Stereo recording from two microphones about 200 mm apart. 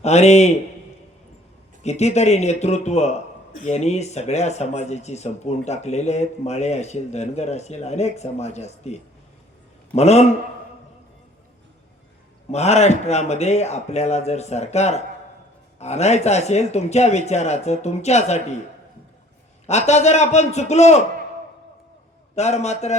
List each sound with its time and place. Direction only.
0.0 s a man's voice: 35° left (ahead or behind)
1.8 s a man's voice: 35° left (ahead or behind)
12.5 s a man's voice: 35° left (ahead or behind)
19.6 s a man's voice: 35° left (ahead or behind)
22.4 s a man's voice: 35° left (ahead or behind)